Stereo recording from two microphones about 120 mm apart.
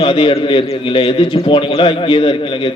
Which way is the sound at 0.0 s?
45° left (ahead or behind).